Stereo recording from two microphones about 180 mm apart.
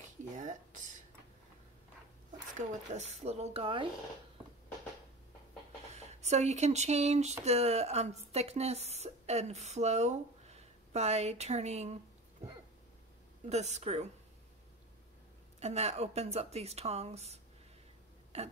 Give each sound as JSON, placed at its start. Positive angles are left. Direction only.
{"t": 2.5, "sound": "speech", "side_deg": -40}
{"t": 5.9, "sound": "speech", "side_deg": -40}
{"t": 13.5, "sound": "speech", "side_deg": -40}
{"t": 15.6, "sound": "speech", "side_deg": -35}
{"t": 18.3, "sound": "burping", "side_deg": -35}